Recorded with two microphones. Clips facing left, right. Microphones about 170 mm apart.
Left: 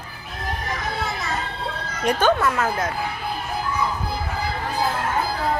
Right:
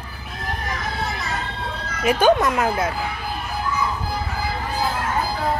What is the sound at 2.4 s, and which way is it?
Speech, 15° right (ahead or behind).